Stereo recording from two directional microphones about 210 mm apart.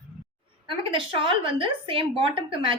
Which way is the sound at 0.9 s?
25° right (ahead or behind).